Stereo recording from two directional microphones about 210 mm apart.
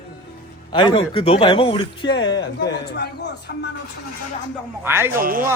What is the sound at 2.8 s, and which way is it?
Speech, 55° left (ahead or behind).